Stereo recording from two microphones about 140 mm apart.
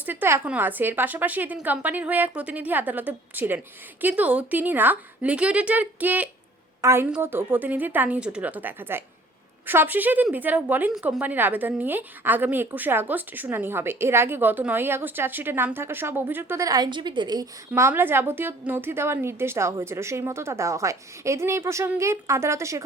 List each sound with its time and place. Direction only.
0.0 s a woman's voice: 15° right (ahead or behind)
17.7 s a woman's voice: 15° right (ahead or behind)